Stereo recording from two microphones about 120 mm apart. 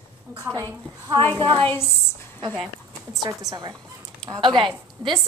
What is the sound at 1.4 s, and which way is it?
Speech, 40° right (ahead or behind).